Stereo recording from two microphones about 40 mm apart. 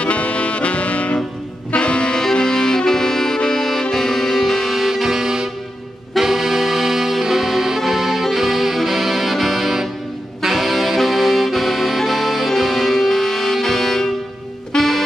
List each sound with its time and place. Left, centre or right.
0.0 s music: left; by 5.5 s centre
6.1 s saxophone: centre
10.4 s music: centre